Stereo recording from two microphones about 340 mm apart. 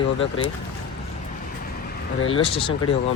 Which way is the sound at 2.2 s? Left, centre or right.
Centre.